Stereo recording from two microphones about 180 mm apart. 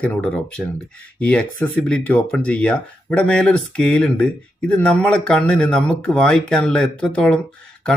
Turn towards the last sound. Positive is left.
turn(degrees=5)  # may be behind; listen again after turning